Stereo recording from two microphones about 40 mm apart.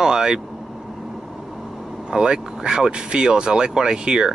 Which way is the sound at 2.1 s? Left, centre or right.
Right.